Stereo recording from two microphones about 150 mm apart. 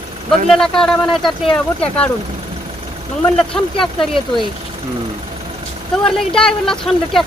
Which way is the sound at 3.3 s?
5° left (ahead or behind).